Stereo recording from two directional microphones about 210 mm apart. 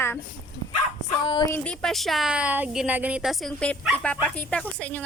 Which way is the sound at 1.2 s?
20° left (ahead or behind).